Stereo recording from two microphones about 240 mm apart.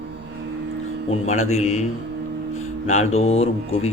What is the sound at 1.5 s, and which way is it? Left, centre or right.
Speech, left.